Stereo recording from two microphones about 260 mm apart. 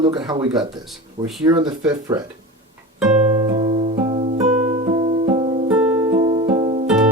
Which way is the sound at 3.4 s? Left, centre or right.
Centre.